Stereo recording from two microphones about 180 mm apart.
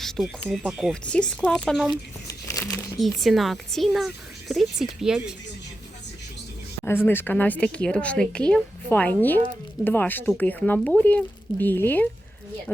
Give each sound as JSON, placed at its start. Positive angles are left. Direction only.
{"t": 0.0, "sound": "a woman's voice", "side_deg": 0}
{"t": 2.2, "sound": "crumpling", "side_deg": 20}
{"t": 3.2, "sound": "a woman's voice", "side_deg": 0}
{"t": 6.8, "sound": "speech", "side_deg": 10}